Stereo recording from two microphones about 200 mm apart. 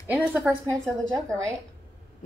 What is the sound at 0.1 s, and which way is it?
A woman's voice, 5° right (ahead or behind).